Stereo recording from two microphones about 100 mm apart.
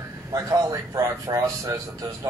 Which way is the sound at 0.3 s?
35° right (ahead or behind).